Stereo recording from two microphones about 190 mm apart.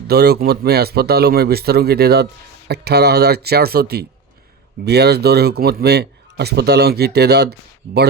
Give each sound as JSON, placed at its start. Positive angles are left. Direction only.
{"t": 0.1, "sound": "speech", "side_deg": -55}